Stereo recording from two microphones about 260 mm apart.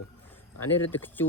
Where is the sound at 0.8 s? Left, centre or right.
Centre.